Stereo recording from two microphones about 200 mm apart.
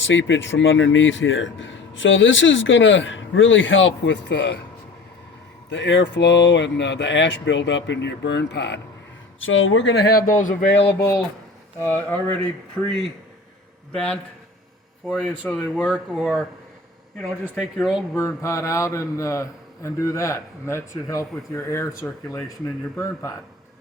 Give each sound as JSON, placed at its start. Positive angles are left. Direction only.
{"t": 0.0, "sound": "speech", "side_deg": 70}
{"t": 5.7, "sound": "speech", "side_deg": 65}
{"t": 9.4, "sound": "speech", "side_deg": 80}
{"t": 11.8, "sound": "a man's voice", "side_deg": 10}
{"t": 13.9, "sound": "speech", "side_deg": 5}
{"t": 17.5, "sound": "speech", "side_deg": 0}
{"t": 18.2, "sound": "a man's voice", "side_deg": 15}